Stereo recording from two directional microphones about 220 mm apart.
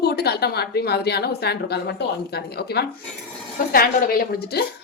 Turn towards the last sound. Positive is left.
turn(degrees=45)  # may be behind; listen again after turning